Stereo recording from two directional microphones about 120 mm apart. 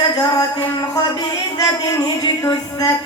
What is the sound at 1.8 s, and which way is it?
A man's voice, 30° left (ahead or behind).